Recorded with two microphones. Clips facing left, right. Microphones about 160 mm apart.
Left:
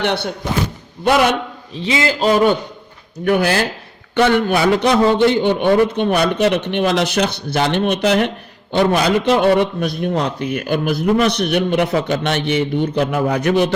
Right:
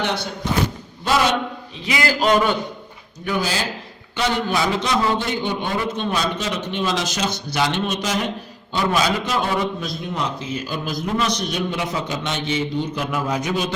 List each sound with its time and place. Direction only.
0.0 s a man's voice: 65° left (ahead or behind)
1.7 s a man's voice: 25° left (ahead or behind)
3.2 s a man's voice: 60° left (ahead or behind)